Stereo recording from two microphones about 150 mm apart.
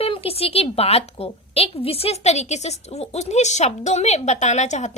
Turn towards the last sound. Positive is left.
turn(degrees=50)  # may be behind; listen again after turning